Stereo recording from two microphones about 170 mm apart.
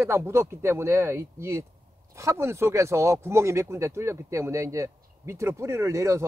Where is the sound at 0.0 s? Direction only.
15° right (ahead or behind).